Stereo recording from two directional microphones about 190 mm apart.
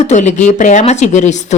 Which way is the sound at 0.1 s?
40° left (ahead or behind).